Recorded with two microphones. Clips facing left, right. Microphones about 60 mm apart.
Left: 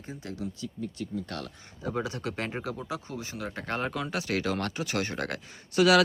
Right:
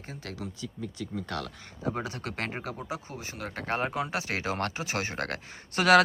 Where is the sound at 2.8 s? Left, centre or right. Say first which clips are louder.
Left 1 dB; right.